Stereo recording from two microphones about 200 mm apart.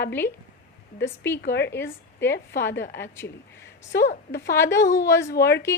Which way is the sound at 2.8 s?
60° left (ahead or behind).